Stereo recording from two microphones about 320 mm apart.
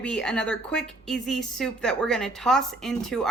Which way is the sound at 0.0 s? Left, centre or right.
Centre.